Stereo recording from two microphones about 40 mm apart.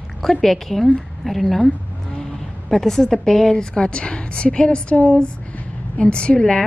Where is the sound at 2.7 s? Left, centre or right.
Centre.